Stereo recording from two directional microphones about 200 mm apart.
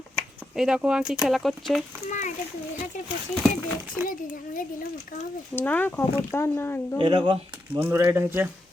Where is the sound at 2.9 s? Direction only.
40° left (ahead or behind).